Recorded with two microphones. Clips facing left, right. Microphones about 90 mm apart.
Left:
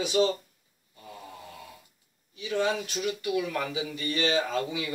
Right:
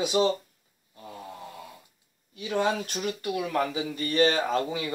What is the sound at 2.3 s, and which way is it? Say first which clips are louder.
Speech: right 1 dB; 50° right (ahead or behind).